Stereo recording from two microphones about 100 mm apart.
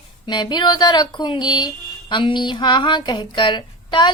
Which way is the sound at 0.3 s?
50° left (ahead or behind).